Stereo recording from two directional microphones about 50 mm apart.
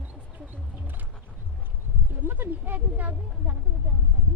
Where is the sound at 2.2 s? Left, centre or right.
Right.